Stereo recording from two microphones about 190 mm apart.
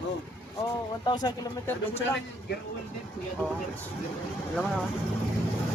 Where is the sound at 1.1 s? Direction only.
20° left (ahead or behind).